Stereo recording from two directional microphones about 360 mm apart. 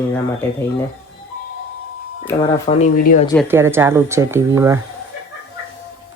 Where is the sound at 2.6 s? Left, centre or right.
Centre.